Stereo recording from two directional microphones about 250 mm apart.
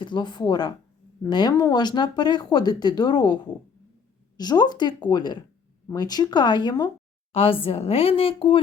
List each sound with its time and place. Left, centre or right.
0.0 s a woman's voice: centre